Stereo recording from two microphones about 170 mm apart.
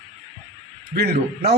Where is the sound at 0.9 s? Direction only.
70° right (ahead or behind).